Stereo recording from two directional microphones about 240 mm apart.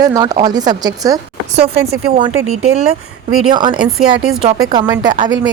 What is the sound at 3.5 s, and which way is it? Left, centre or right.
Speech, centre.